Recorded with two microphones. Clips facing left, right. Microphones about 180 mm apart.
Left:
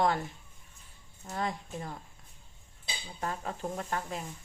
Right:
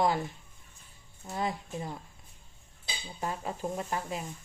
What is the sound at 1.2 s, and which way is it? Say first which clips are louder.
Speech: right 1 dB; 5° right (ahead or behind).